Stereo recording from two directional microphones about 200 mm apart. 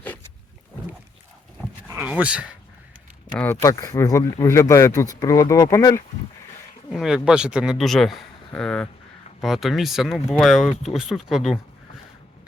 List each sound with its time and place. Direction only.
1.9 s speech: 10° right (ahead or behind)
3.3 s speech: 10° left (ahead or behind)
6.9 s speech: 5° right (ahead or behind)